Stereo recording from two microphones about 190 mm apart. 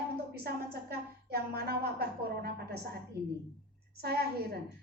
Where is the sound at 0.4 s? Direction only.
55° right (ahead or behind).